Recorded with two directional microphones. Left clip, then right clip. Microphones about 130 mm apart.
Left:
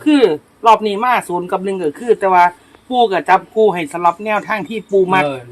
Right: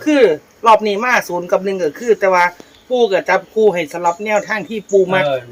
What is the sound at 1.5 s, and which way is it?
Speech, 85° left.